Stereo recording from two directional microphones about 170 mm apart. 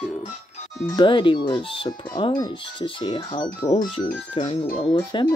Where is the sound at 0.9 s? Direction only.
30° left (ahead or behind).